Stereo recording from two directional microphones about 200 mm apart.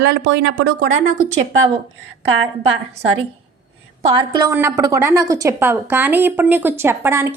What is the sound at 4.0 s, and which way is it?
Speech, 25° right (ahead or behind).